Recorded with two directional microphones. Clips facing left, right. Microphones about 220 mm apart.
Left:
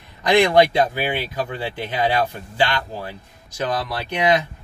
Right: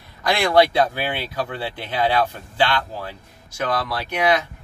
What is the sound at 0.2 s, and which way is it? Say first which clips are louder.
Speech: left 2 dB; 20° left (ahead or behind).